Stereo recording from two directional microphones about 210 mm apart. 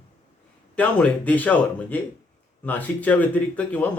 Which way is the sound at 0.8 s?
5° left (ahead or behind).